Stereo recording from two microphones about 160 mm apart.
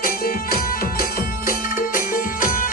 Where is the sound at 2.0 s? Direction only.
60° left (ahead or behind).